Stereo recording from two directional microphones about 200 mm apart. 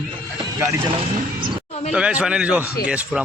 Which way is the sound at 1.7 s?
30° left (ahead or behind).